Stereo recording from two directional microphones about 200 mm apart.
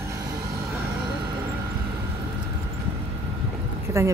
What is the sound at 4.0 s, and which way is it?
Speech, 15° right (ahead or behind).